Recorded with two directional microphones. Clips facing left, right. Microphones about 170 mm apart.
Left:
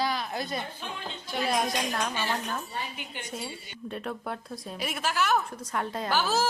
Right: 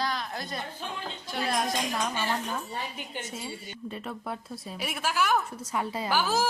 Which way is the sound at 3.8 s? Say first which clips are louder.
Left 2 dB; centre (ahead or behind).